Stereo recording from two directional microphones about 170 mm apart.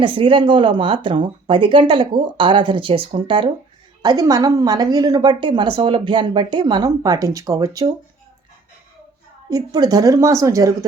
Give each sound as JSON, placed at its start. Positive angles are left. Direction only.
{"t": 0.0, "sound": "a woman's voice", "side_deg": -30}
{"t": 9.5, "sound": "a woman's voice", "side_deg": -20}